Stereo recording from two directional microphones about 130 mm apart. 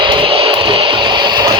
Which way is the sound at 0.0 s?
40° right (ahead or behind).